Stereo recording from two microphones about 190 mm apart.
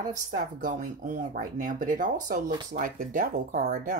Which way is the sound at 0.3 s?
45° right (ahead or behind).